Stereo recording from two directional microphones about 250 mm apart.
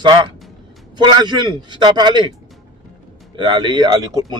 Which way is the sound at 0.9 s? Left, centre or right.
Centre.